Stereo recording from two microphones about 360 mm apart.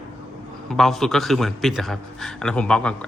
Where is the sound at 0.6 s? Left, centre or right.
Centre.